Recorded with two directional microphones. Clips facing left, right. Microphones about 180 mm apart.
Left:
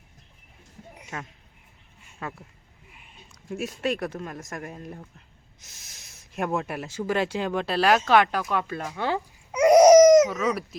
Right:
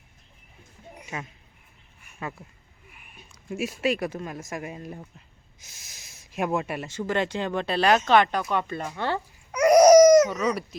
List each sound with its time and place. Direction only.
1.1 s speech: 15° right (ahead or behind)
2.2 s speech: centre (ahead or behind)
2.9 s a sound: 25° left (ahead or behind)
3.5 s speech: centre (ahead or behind)
9.5 s a sound: 20° left (ahead or behind)
10.2 s speech: centre (ahead or behind)